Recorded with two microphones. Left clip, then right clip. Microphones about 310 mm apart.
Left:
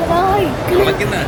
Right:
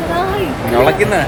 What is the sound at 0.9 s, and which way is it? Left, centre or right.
Speech, centre.